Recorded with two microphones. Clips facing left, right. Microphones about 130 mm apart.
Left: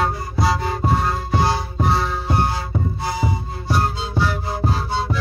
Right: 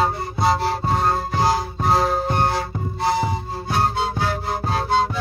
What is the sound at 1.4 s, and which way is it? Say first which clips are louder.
Music: right 1 dB; 40° right (ahead or behind).